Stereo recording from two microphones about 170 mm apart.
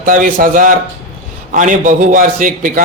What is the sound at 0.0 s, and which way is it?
A man's voice, 50° right (ahead or behind).